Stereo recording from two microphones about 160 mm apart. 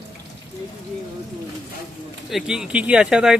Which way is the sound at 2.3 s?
5° right (ahead or behind).